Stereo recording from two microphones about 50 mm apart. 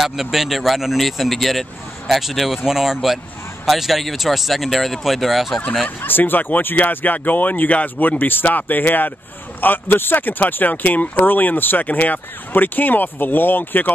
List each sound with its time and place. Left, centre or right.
0.0 s speech: centre
5.9 s speech: left